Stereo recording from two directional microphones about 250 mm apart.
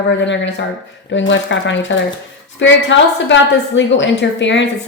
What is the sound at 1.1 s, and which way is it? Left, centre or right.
A woman's voice, left.